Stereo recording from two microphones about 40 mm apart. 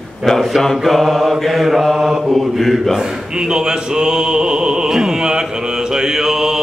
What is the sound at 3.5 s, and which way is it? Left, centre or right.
Music, centre.